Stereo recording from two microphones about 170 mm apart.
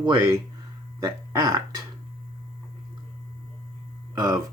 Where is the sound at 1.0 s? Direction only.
20° right (ahead or behind).